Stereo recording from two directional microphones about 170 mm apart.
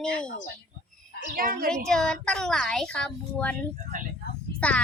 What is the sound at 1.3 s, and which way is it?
Speech, 55° right (ahead or behind).